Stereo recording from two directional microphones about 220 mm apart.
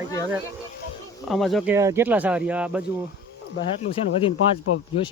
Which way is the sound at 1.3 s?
Centre (ahead or behind).